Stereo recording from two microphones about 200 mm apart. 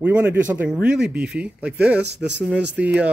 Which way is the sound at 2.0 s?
55° right (ahead or behind).